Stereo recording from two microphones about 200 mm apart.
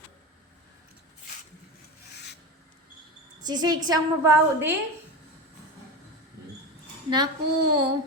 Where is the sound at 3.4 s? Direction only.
20° right (ahead or behind).